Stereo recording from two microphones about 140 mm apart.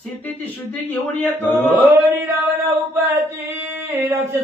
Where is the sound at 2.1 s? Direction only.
15° right (ahead or behind).